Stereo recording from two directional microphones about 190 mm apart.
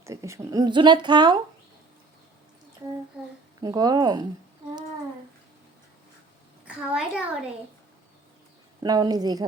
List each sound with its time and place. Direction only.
0.0 s speech: 15° right (ahead or behind)
3.6 s speech: 20° right (ahead or behind)
6.7 s a child's voice: 5° right (ahead or behind)
8.8 s speech: 20° right (ahead or behind)